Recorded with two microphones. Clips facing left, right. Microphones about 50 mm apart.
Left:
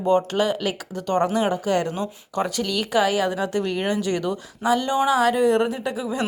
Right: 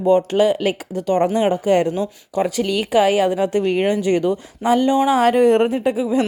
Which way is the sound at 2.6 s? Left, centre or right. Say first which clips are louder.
Right 5 dB; right.